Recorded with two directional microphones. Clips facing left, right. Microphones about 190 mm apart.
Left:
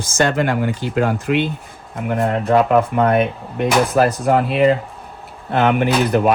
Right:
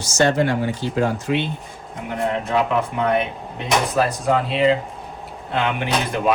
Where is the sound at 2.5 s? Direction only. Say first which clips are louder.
Left 9 dB; 50° left (ahead or behind).